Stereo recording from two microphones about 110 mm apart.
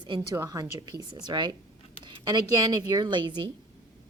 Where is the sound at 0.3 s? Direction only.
30° right (ahead or behind).